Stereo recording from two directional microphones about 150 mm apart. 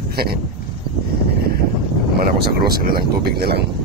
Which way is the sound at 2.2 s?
90° right.